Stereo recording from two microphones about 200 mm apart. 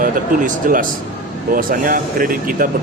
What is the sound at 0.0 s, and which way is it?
Speech, 45° right (ahead or behind).